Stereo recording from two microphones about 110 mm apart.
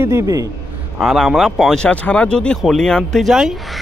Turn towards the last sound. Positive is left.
turn(degrees=0)  # may be behind; listen again after turning